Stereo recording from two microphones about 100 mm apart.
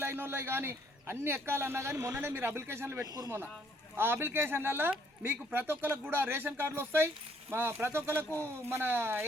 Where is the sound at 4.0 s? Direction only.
20° right (ahead or behind).